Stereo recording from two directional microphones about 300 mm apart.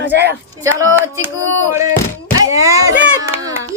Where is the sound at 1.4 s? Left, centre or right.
Right.